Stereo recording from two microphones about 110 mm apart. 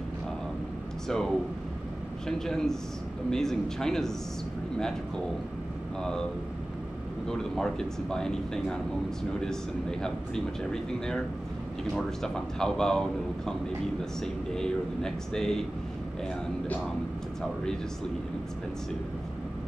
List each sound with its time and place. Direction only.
1.0 s speech: 5° left (ahead or behind)
7.2 s speech: 5° left (ahead or behind)
14.2 s speech: 5° left (ahead or behind)
16.6 s speech: 15° left (ahead or behind)